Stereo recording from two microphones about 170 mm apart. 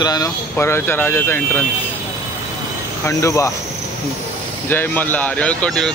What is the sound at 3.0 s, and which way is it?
Speech, 15° left (ahead or behind).